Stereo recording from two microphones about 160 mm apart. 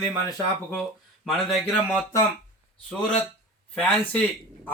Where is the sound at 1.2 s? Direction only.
5° left (ahead or behind).